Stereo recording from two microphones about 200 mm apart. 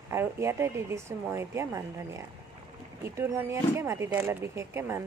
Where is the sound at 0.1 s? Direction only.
15° right (ahead or behind).